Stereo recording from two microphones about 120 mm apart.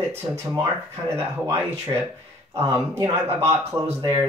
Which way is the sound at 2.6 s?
20° right (ahead or behind).